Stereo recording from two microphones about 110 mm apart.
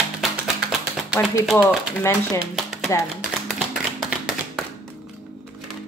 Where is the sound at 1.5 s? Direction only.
25° left (ahead or behind).